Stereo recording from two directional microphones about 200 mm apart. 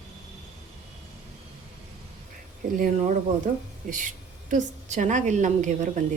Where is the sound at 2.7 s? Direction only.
40° right (ahead or behind).